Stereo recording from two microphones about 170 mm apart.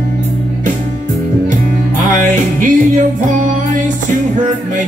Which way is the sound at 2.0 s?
50° right (ahead or behind).